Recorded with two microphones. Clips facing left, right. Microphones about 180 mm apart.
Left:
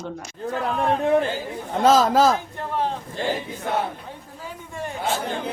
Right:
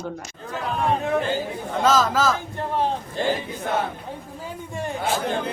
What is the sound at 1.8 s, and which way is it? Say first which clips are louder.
Speech: left 4 dB; 35° left (ahead or behind).